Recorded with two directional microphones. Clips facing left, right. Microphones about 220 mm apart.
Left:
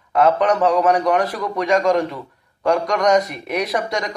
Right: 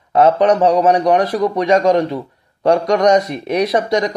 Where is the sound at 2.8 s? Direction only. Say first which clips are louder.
Right 4 dB; 25° right (ahead or behind).